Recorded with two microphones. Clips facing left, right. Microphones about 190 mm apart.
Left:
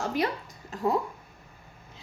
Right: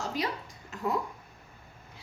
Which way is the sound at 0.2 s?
55° left (ahead or behind).